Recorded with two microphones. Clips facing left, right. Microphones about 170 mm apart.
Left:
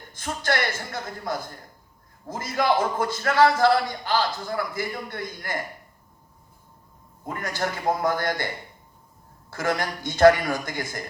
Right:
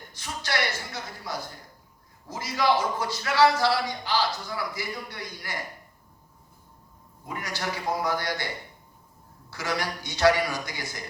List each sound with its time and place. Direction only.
0.1 s a man's voice: 50° left (ahead or behind)
7.3 s a man's voice: 50° left (ahead or behind)
9.5 s a man's voice: 50° left (ahead or behind)